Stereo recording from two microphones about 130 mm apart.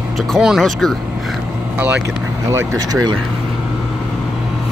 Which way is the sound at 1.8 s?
15° right (ahead or behind).